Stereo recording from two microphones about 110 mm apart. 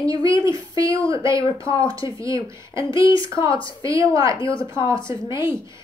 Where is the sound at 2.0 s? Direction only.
45° left (ahead or behind).